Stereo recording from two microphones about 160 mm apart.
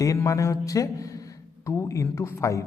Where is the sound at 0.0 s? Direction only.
20° left (ahead or behind).